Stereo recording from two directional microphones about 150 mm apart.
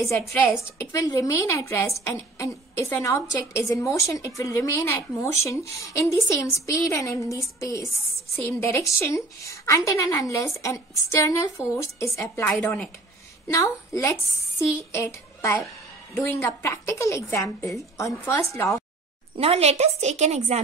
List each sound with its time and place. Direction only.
0.7 s a woman's voice: 20° left (ahead or behind)
13.5 s a woman's voice: 20° left (ahead or behind)
19.3 s a woman's voice: 40° right (ahead or behind)